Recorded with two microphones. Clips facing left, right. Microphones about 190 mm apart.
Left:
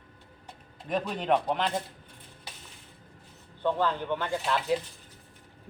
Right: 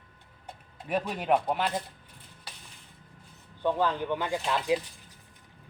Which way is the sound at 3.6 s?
15° right (ahead or behind).